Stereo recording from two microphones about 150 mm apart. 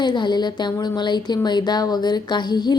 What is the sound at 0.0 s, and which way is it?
Speech, 30° left (ahead or behind).